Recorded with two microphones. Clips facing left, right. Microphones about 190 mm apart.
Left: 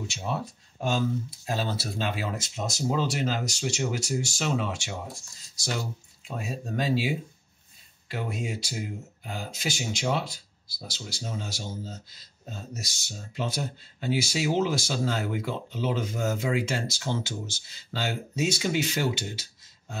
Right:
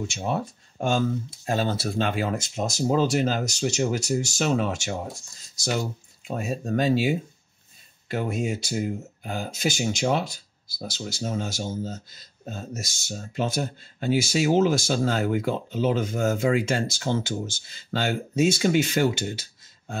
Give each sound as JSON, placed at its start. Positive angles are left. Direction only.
{"t": 0.1, "sound": "speech", "side_deg": -50}
{"t": 6.2, "sound": "speech", "side_deg": -45}